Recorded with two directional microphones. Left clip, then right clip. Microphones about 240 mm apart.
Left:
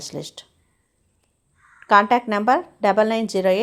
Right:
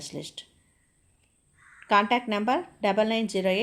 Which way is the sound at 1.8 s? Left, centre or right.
Centre.